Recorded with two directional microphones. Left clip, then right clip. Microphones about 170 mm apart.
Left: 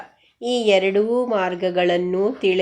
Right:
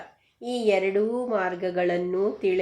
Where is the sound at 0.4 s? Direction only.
35° left (ahead or behind).